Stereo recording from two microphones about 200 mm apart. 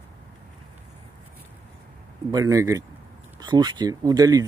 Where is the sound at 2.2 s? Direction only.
15° right (ahead or behind).